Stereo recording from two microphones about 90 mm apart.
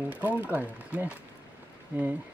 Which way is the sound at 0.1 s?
20° right (ahead or behind).